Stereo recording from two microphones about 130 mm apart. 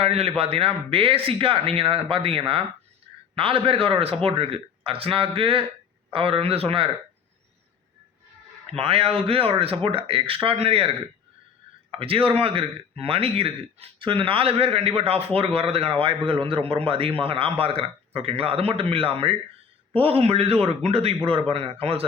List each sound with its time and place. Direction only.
0.0 s speech: 50° right (ahead or behind)
8.6 s speech: 45° right (ahead or behind)